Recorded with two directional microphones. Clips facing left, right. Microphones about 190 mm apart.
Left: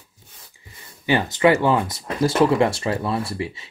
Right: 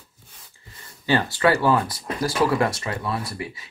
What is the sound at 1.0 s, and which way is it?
Speech, 15° left (ahead or behind).